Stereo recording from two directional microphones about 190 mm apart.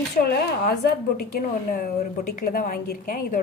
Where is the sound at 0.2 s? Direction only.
50° left (ahead or behind).